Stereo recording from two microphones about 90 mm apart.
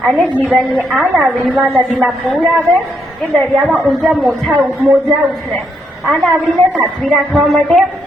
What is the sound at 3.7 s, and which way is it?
Speech, centre (ahead or behind).